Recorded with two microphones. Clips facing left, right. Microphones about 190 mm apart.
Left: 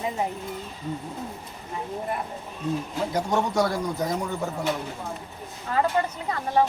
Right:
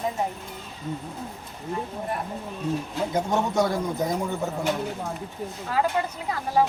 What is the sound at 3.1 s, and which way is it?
A man's voice, 20° right (ahead or behind).